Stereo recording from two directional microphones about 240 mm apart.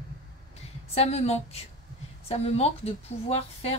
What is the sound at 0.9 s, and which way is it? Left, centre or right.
A woman's voice, left.